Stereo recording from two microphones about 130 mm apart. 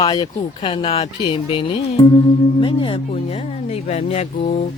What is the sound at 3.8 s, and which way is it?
Speech, 60° left (ahead or behind).